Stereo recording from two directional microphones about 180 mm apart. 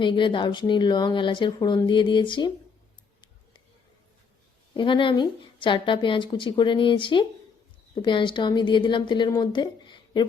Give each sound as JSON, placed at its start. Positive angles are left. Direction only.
{"t": 0.0, "sound": "a woman's voice", "side_deg": 25}
{"t": 4.7, "sound": "a woman's voice", "side_deg": 25}